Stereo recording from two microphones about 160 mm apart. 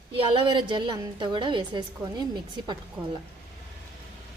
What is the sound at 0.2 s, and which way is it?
A woman's voice, 30° right (ahead or behind).